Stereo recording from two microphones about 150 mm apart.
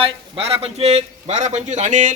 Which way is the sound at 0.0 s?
40° right (ahead or behind).